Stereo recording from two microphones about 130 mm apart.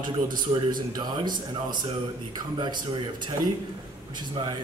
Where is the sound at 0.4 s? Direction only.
35° right (ahead or behind).